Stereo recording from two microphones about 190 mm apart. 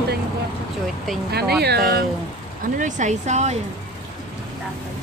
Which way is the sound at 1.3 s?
55° right (ahead or behind).